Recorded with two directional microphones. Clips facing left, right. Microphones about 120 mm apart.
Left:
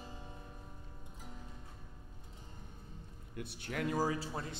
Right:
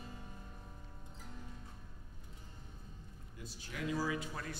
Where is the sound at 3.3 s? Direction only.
65° left (ahead or behind).